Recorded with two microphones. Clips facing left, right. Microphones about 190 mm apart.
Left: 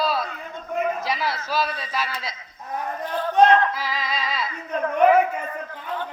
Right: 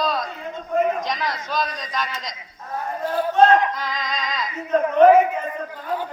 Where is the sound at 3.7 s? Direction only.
5° left (ahead or behind).